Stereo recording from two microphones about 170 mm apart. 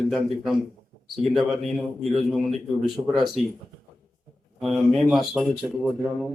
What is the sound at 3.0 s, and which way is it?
Speech, 15° right (ahead or behind).